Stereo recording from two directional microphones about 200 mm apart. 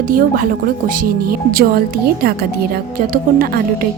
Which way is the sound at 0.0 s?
45° right (ahead or behind).